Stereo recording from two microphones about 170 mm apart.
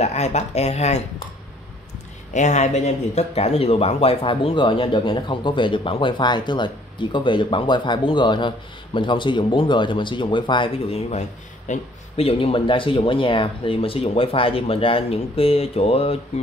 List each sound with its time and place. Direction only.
0.0 s a man's voice: 40° left (ahead or behind)
2.3 s a man's voice: 45° left (ahead or behind)